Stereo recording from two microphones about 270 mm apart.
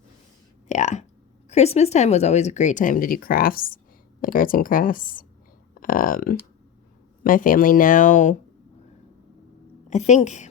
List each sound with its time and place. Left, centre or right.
0.7 s speech: left
9.9 s speech: left